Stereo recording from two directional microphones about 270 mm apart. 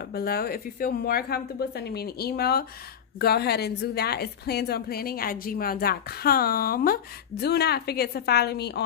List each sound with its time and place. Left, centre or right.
0.1 s a woman's voice: left